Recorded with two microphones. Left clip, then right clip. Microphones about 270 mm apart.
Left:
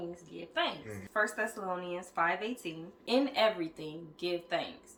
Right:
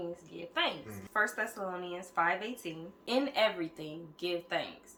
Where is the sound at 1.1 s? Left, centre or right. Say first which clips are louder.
Even; centre.